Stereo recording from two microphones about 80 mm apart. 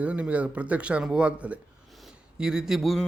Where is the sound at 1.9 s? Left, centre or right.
Centre.